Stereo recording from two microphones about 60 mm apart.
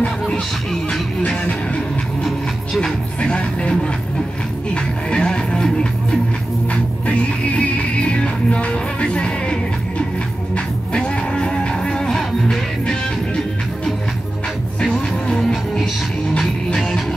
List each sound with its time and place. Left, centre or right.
1.2 s music: left
2.8 s music: centre
6.7 s music: left
14.8 s music: centre